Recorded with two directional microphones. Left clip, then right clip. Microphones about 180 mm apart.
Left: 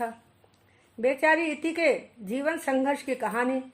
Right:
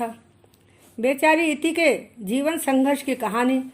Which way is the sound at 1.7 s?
50° right (ahead or behind).